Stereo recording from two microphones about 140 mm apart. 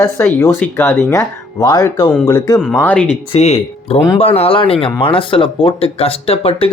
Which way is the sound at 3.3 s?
45° left (ahead or behind).